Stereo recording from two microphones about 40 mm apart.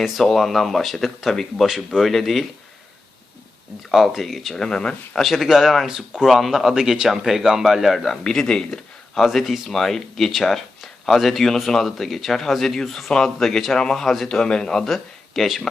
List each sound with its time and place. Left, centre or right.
0.0 s speech: centre
1.6 s speech: centre
3.9 s speech: centre
4.6 s speech: centre
5.2 s speech: centre
8.2 s speech: centre
9.1 s speech: centre
14.8 s speech: centre